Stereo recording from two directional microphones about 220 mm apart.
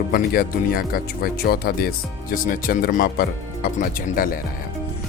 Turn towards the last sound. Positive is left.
turn(degrees=40)  # may be behind; listen again after turning